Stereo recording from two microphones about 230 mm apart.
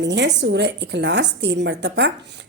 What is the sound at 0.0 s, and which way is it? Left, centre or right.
A woman's voice, right.